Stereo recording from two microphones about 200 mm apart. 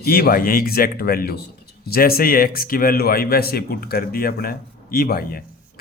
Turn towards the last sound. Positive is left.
turn(degrees=45)  # may be behind; listen again after turning